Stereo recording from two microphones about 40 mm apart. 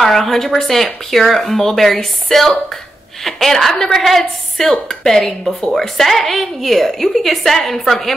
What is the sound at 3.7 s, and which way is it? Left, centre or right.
A woman's voice, centre.